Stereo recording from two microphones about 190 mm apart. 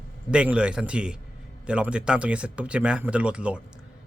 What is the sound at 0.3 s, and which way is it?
Speech, 5° right (ahead or behind).